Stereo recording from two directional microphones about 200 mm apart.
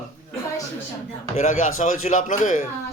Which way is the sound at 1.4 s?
40° left (ahead or behind).